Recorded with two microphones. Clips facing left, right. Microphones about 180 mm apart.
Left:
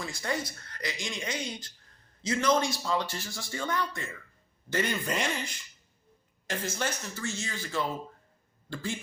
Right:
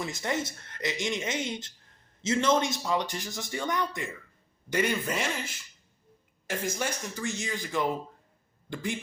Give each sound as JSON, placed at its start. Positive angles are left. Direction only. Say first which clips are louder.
{"t": 0.0, "sound": "a man's voice", "louder": "right 2 dB", "side_deg": -20}